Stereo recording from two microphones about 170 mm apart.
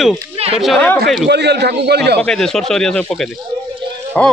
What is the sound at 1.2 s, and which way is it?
Speech, 80° right.